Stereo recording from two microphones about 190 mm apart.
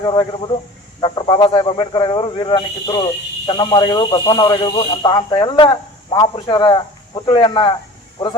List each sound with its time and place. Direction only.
0.0 s speech: 25° left (ahead or behind)